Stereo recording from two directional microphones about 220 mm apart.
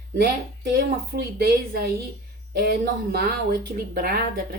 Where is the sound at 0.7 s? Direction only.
45° right (ahead or behind).